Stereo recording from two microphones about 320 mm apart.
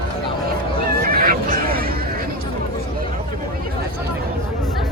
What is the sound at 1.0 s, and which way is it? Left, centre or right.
Fowl, right.